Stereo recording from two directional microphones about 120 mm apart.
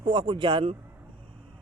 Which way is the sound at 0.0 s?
45° right (ahead or behind).